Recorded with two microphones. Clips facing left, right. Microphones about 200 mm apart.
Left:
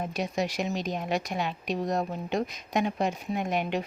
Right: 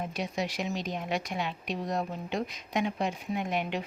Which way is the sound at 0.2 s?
45° left (ahead or behind).